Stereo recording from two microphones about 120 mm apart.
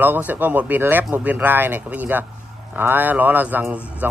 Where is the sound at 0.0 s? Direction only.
15° right (ahead or behind).